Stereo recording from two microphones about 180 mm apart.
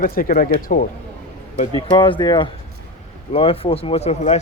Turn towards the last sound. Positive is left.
turn(degrees=35)  # may be behind; listen again after turning